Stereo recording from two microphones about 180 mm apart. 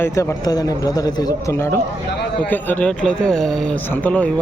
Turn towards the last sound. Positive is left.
turn(degrees=5)  # may be behind; listen again after turning